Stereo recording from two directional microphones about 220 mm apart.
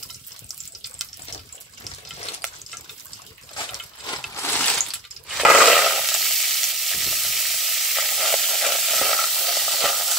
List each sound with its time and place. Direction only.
2.3 s water: centre (ahead or behind)
3.5 s a sound: 20° left (ahead or behind)
5.3 s sizzle: centre (ahead or behind)